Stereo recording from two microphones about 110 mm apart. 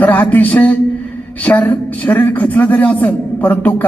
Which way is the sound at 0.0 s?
15° left (ahead or behind).